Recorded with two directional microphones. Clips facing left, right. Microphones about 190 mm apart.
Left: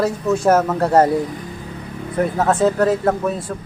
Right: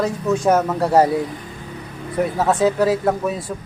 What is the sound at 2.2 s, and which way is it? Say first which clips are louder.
Speech: left 1 dB; centre (ahead or behind).